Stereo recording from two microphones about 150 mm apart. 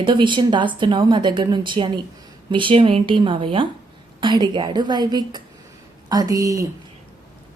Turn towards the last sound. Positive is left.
turn(degrees=-20)  # may be behind; listen again after turning